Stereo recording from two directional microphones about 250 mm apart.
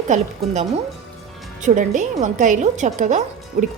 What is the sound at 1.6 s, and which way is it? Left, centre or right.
A woman's voice, right.